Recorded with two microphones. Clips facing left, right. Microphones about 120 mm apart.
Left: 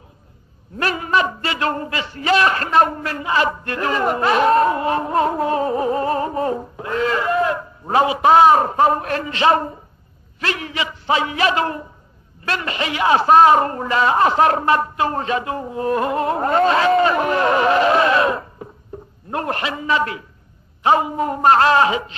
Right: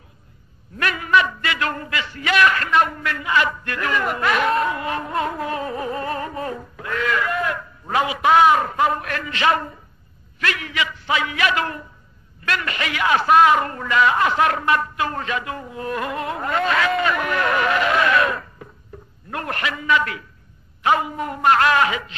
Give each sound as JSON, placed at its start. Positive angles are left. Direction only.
{"t": 0.7, "sound": "a man's voice", "side_deg": 30}